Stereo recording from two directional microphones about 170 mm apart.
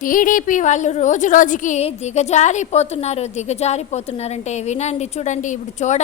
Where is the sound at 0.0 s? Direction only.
50° left (ahead or behind).